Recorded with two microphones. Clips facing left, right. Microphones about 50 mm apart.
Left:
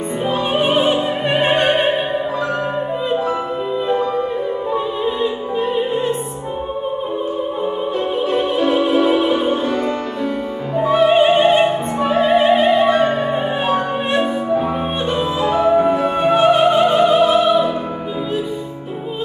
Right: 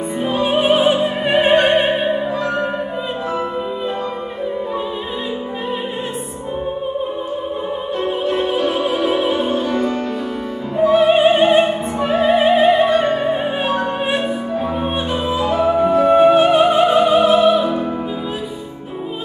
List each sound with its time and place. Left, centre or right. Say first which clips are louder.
0.4 s music: right 3 dB; centre
8.3 s opera: left 2 dB; centre
9.3 s music: left 1 dB; centre
10.8 s opera: right 1 dB; centre
15.8 s music: right 1 dB; centre
16.1 s music: right 6 dB; centre